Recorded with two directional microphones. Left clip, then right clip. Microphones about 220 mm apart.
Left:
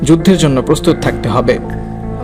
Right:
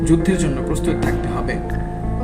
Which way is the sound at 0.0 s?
45° left (ahead or behind).